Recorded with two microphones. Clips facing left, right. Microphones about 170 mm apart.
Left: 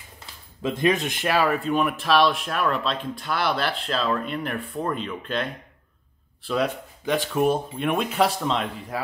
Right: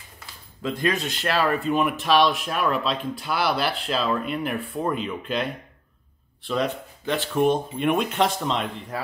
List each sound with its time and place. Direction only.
0.6 s speech: 20° left (ahead or behind)
1.6 s speech: centre (ahead or behind)